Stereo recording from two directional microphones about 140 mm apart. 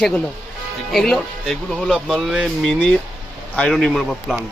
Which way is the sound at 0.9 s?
5° left (ahead or behind).